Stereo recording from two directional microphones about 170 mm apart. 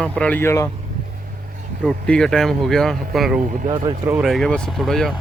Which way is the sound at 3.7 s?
25° right (ahead or behind).